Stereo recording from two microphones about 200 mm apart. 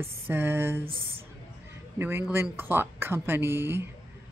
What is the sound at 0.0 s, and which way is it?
Speech, 10° right (ahead or behind).